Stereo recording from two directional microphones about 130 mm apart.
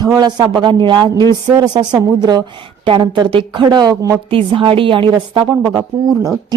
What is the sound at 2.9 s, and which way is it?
Speech, 35° right (ahead or behind).